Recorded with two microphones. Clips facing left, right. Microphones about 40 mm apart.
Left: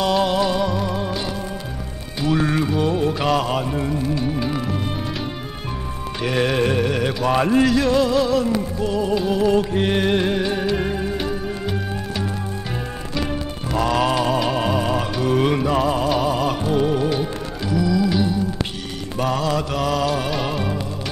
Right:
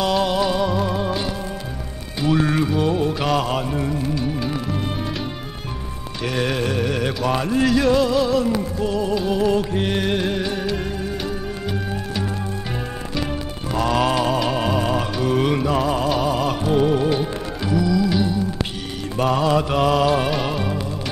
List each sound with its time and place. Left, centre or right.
0.0 s music: centre
2.2 s music: centre
6.2 s music: centre
6.8 s mantra: centre
7.3 s music: left
7.6 s music: centre
19.1 s mantra: centre
20.3 s music: centre